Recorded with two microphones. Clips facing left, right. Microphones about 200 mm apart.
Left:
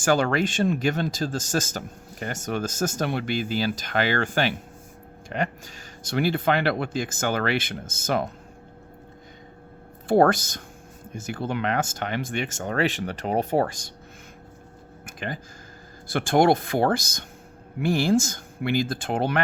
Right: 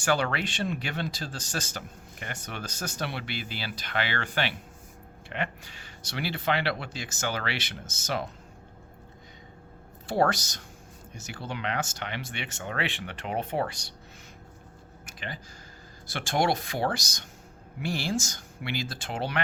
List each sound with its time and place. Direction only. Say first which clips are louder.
0.0 s speech: left 6 dB; 45° left (ahead or behind)
10.1 s speech: left 7 dB; 55° left (ahead or behind)
15.0 s a sound: left 7 dB; 50° left (ahead or behind)
16.1 s speech: left 8 dB; 55° left (ahead or behind)